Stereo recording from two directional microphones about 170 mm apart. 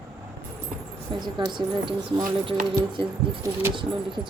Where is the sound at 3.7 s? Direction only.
30° right (ahead or behind).